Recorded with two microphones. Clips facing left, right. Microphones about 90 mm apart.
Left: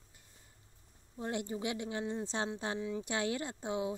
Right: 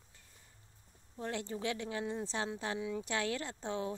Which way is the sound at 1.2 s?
15° left (ahead or behind).